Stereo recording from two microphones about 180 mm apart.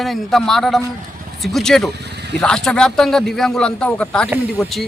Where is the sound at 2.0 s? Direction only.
65° right (ahead or behind).